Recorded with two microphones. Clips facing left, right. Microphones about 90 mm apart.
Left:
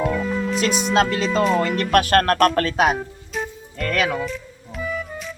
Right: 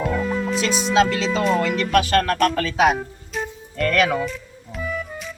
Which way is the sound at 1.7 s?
50° left (ahead or behind).